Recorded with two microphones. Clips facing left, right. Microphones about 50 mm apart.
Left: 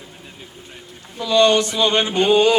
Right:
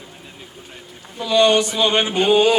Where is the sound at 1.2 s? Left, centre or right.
Centre.